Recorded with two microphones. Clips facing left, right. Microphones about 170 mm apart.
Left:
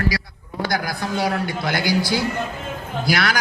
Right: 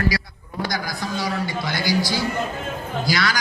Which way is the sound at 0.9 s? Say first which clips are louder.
Left 3 dB; 60° left (ahead or behind).